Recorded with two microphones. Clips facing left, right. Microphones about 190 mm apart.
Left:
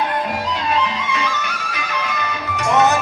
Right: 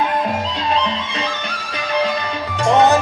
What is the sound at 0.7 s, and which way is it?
Music, 30° right (ahead or behind).